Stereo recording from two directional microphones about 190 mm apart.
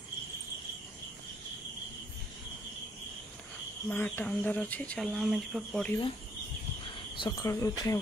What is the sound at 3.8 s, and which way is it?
Speech, 10° left (ahead or behind).